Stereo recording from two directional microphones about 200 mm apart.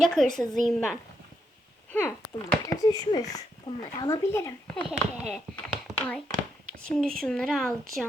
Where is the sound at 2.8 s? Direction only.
20° left (ahead or behind).